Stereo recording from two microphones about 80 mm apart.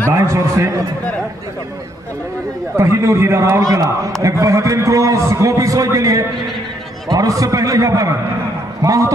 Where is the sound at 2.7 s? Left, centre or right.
Right.